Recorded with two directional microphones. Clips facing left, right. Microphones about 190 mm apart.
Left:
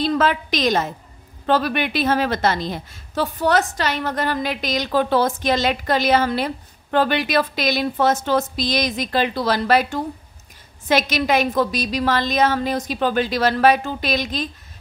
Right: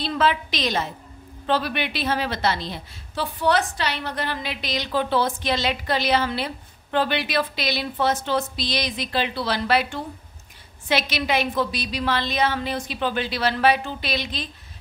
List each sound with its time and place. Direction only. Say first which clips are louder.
0.0 s a woman's voice: left 3 dB; 45° left (ahead or behind)